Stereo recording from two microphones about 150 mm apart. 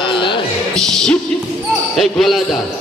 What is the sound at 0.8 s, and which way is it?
Music, 5° left (ahead or behind).